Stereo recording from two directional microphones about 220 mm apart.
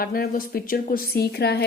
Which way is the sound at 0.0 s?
40° left (ahead or behind).